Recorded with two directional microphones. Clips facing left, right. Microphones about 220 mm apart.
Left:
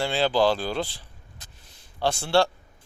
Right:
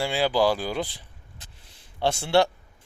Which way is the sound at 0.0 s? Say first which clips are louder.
Even; 10° right (ahead or behind).